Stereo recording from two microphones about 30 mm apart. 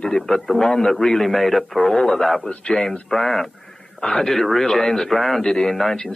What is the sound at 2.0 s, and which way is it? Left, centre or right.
Speech, centre.